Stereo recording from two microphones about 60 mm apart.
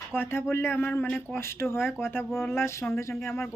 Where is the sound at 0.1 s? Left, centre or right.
Left.